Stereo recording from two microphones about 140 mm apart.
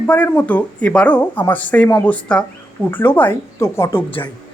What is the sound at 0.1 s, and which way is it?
A woman's voice, 10° left (ahead or behind).